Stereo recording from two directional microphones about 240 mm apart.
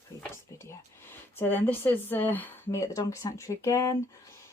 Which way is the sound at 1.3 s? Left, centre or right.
Centre.